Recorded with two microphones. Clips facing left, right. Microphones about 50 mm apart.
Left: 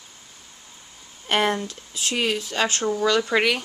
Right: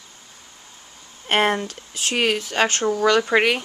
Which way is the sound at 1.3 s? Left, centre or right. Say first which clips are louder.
Right 2 dB; right.